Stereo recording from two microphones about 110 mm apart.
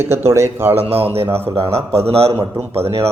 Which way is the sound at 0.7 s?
65° right (ahead or behind).